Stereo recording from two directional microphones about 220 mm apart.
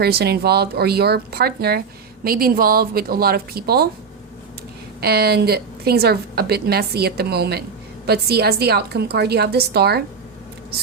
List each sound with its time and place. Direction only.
0.0 s a woman's voice: 45° right (ahead or behind)
4.9 s a woman's voice: 45° right (ahead or behind)